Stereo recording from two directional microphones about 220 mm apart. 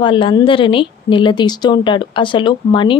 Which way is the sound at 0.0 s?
20° left (ahead or behind).